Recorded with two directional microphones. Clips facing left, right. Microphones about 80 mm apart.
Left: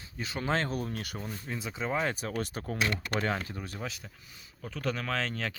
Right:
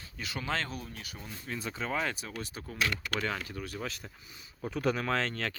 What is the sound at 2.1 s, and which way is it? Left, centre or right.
Speech, left.